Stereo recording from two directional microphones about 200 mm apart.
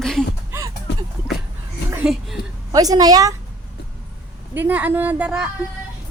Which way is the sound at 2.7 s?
20° right (ahead or behind).